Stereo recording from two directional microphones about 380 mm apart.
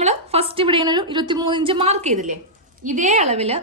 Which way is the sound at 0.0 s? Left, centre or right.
Centre.